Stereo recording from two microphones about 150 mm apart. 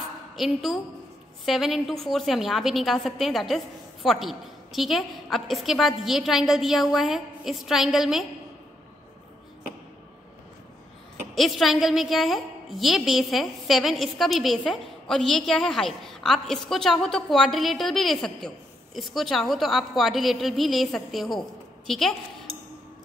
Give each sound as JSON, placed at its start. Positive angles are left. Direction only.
{"t": 0.4, "sound": "a woman's voice", "side_deg": 0}
{"t": 11.3, "sound": "a woman's voice", "side_deg": 0}